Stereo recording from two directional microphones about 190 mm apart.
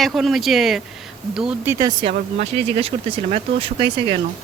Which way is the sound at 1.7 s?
20° right (ahead or behind).